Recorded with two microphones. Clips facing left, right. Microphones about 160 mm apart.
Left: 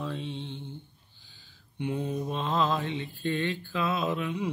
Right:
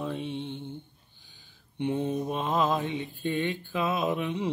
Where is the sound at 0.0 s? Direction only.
20° right (ahead or behind).